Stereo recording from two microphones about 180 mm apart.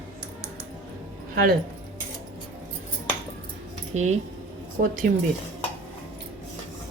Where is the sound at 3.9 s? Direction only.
40° right (ahead or behind).